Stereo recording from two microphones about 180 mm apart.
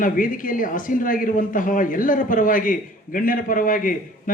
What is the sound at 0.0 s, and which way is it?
Speech, 50° left (ahead or behind).